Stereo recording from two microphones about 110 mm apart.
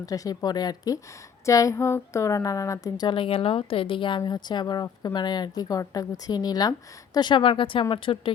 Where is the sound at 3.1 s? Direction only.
55° left (ahead or behind).